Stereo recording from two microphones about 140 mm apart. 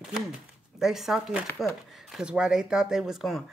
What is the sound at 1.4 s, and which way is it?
Speech, 20° left (ahead or behind).